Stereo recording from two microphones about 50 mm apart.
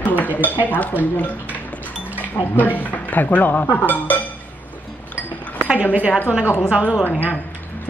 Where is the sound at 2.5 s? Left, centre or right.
Left.